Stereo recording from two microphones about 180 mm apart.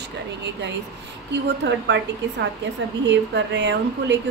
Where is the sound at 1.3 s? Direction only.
75° right (ahead or behind).